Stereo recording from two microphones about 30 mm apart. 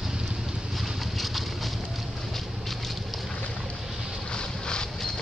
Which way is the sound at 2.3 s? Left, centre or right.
Centre.